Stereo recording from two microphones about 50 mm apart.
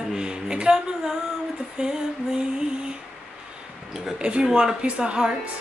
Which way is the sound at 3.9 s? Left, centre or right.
Centre.